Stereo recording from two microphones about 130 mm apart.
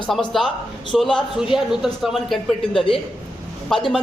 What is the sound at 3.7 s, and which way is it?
Speech, 5° left (ahead or behind).